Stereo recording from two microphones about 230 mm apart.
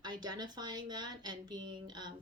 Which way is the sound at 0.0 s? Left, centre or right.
Centre.